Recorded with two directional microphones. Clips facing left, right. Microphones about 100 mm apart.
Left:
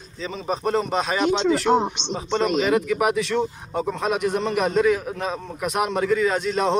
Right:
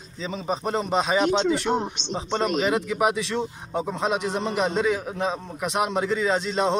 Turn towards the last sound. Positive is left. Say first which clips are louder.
# left 1 dB
turn(degrees=-25)  # may be behind; listen again after turning